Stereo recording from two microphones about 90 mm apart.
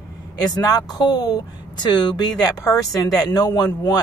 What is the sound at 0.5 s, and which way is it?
Speech, 45° left (ahead or behind).